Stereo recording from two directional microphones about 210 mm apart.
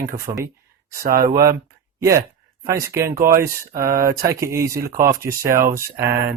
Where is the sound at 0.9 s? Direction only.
45° right (ahead or behind).